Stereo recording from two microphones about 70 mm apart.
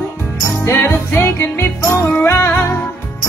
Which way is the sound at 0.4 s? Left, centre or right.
Left.